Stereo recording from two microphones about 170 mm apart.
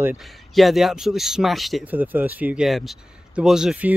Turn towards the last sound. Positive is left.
turn(degrees=-5)  # may be behind; listen again after turning